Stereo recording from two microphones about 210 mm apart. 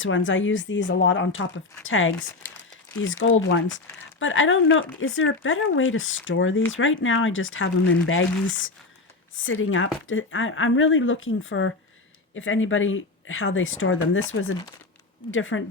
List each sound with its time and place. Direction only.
0.3 s speech: 65° left (ahead or behind)